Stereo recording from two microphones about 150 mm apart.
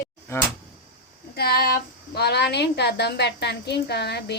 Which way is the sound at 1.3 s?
90° left.